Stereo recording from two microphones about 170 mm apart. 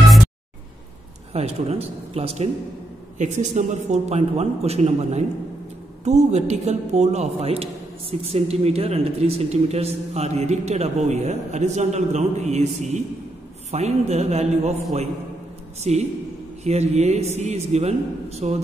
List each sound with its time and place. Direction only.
1.3 s a man's voice: 35° right (ahead or behind)
15.8 s speech: 40° right (ahead or behind)